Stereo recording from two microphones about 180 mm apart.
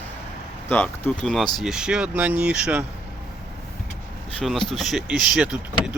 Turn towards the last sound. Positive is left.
turn(degrees=-5)  # may be behind; listen again after turning